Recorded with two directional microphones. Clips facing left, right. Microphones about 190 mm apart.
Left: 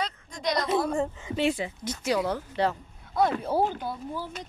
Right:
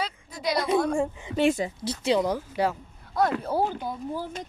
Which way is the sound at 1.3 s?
45° right (ahead or behind).